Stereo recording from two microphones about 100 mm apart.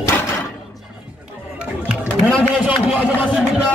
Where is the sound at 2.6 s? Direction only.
10° right (ahead or behind).